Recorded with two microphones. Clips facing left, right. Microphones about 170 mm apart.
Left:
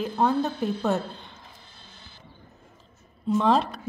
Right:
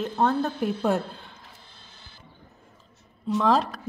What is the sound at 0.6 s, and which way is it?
Speech, 10° right (ahead or behind).